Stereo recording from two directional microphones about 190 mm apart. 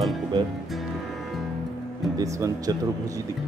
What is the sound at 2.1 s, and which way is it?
Speech, 20° right (ahead or behind).